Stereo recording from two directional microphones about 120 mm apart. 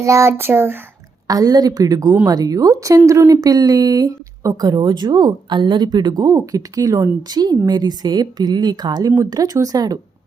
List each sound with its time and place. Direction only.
0.0 s speech: 25° right (ahead or behind)
1.3 s speech: 30° right (ahead or behind)